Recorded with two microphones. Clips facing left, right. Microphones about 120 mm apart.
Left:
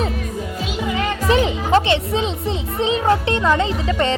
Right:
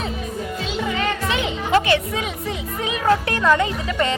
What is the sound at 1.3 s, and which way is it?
Music, 35° left (ahead or behind).